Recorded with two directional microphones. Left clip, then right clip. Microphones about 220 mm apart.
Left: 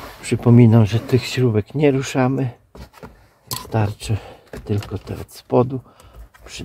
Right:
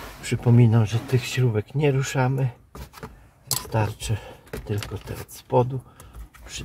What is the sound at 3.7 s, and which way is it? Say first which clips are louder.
Speech: left 5 dB; 40° left (ahead or behind).